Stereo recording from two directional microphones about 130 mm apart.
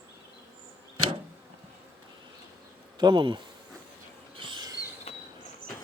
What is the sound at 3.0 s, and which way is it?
Speech, 35° right (ahead or behind).